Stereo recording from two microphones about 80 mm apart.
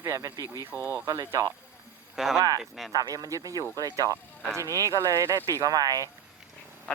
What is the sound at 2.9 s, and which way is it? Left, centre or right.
Speech, right.